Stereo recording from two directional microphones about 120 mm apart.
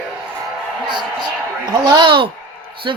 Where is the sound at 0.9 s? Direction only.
40° right (ahead or behind).